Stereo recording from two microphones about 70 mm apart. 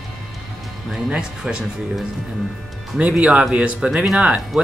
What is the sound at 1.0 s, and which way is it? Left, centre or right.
Speech, centre.